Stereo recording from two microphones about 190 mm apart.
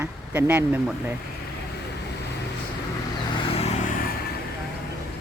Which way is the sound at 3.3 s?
30° left (ahead or behind).